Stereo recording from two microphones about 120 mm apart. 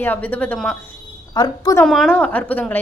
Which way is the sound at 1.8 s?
Centre (ahead or behind).